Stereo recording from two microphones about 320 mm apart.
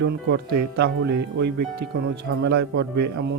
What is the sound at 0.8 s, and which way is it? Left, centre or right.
Speech, right.